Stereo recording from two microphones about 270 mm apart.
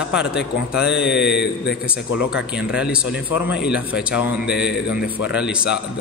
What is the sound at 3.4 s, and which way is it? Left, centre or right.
Speech, left.